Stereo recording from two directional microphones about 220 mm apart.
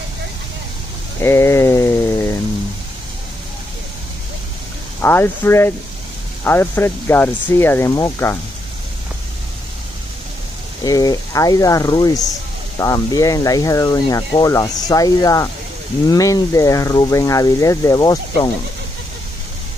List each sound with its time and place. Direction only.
1.2 s a sound: 10° left (ahead or behind)
5.0 s speech: 10° left (ahead or behind)
10.8 s speech: 15° left (ahead or behind)